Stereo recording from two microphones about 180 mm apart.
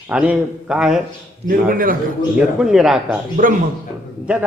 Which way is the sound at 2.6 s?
5° right (ahead or behind).